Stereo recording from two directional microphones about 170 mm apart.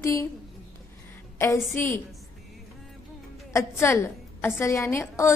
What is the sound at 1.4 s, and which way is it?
Speech, 15° left (ahead or behind).